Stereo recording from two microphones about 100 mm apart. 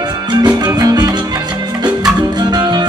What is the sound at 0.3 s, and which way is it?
Music, 45° right (ahead or behind).